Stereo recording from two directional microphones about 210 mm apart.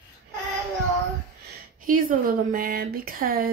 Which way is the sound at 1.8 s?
40° right (ahead or behind).